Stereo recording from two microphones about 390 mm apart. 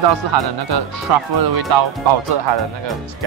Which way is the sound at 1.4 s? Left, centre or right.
Right.